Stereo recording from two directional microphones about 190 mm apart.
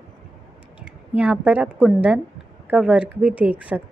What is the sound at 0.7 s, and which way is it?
A woman's voice, 5° right (ahead or behind).